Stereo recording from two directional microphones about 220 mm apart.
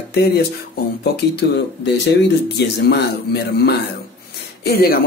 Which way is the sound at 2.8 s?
45° left (ahead or behind).